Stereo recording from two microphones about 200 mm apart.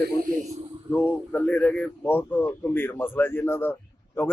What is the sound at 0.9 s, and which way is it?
Speech, 10° left (ahead or behind).